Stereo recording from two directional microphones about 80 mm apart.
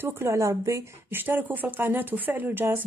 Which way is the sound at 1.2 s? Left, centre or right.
Right.